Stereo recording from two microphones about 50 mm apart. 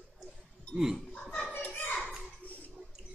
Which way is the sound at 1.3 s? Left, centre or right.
Left.